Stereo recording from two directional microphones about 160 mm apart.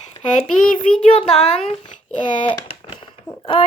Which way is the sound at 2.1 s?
30° left (ahead or behind).